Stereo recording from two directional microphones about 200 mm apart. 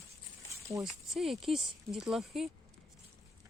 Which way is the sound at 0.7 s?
15° right (ahead or behind).